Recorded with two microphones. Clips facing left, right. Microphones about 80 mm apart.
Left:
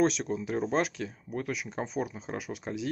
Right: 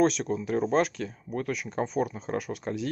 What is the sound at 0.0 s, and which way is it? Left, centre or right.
Speech, centre.